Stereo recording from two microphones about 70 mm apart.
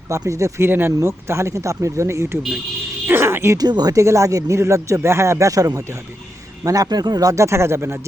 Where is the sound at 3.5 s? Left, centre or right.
Right.